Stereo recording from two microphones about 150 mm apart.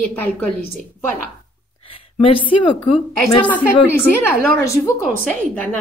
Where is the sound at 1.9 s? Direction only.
35° left (ahead or behind).